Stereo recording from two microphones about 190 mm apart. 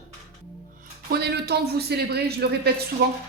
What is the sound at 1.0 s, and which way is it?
Speech, 60° right (ahead or behind).